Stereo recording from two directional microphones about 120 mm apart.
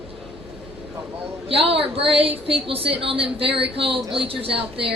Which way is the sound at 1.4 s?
55° right (ahead or behind).